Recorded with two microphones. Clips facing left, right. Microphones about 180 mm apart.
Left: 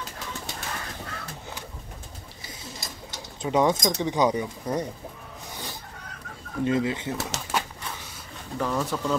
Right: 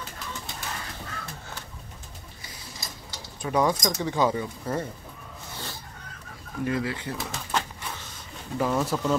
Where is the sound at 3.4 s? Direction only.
20° left (ahead or behind).